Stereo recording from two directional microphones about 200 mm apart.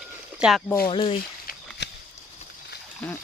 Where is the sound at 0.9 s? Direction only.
25° left (ahead or behind).